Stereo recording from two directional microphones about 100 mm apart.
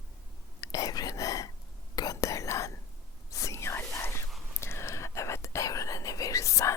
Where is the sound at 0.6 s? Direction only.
35° left (ahead or behind).